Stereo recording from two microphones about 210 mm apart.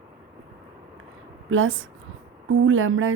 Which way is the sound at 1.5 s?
80° right.